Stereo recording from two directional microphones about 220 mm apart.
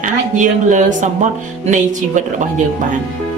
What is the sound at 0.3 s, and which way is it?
Speech, 35° right (ahead or behind).